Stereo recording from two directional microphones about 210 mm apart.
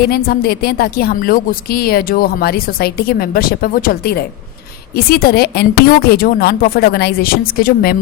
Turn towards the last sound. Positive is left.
turn(degrees=45)  # may be behind; listen again after turning